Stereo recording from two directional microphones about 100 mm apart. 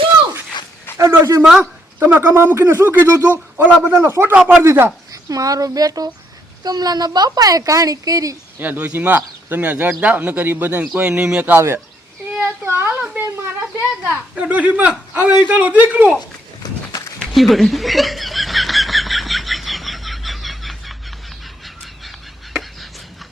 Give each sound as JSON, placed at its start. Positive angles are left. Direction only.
{"t": 0.9, "sound": "speech", "side_deg": -30}
{"t": 1.5, "sound": "speech", "side_deg": -5}
{"t": 2.0, "sound": "speech", "side_deg": -20}
{"t": 4.6, "sound": "speech", "side_deg": -25}
{"t": 5.1, "sound": "speech", "side_deg": -35}
{"t": 8.5, "sound": "speech", "side_deg": -15}
{"t": 12.4, "sound": "a sound", "side_deg": -25}
{"t": 13.7, "sound": "speech", "side_deg": -10}
{"t": 17.2, "sound": "snicker", "side_deg": 0}